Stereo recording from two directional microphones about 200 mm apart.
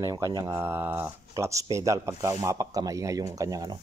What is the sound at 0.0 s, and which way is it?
Speech, 15° right (ahead or behind).